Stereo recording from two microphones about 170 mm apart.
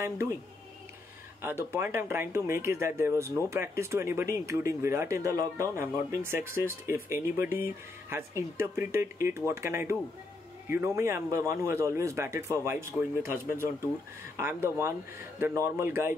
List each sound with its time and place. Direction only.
1.4 s speech: 15° right (ahead or behind)